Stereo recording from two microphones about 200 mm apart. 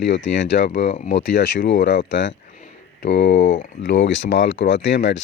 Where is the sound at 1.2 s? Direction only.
65° left (ahead or behind).